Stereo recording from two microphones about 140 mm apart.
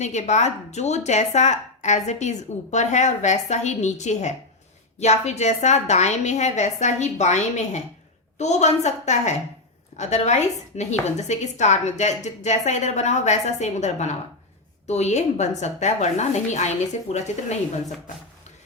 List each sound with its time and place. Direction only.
0.0 s a woman's voice: 55° left (ahead or behind)